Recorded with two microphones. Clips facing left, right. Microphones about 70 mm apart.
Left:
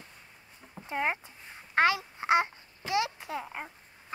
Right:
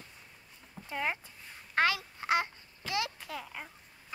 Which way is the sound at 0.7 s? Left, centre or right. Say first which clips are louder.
Left 4 dB; left.